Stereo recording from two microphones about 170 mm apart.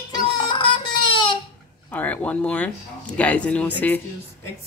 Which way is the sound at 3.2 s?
5° left (ahead or behind).